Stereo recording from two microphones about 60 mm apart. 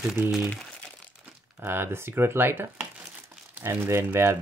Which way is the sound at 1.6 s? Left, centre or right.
Right.